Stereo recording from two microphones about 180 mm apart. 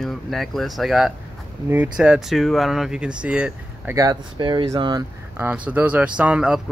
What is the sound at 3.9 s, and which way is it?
Speech, 25° right (ahead or behind).